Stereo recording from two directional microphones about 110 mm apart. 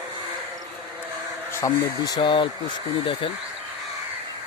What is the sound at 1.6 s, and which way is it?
Speech, 30° left (ahead or behind).